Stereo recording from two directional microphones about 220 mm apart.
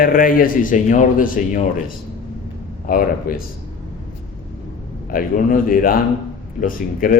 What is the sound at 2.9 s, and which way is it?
Speech, 40° left (ahead or behind).